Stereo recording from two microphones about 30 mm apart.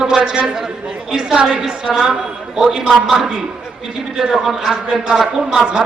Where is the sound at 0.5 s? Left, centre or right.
Centre.